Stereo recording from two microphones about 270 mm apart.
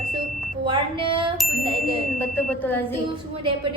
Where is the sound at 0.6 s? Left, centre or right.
Centre.